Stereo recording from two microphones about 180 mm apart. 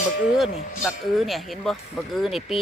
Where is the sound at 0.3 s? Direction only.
Centre (ahead or behind).